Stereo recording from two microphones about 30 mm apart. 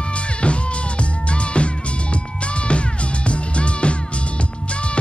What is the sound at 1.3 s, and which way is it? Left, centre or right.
Music, left.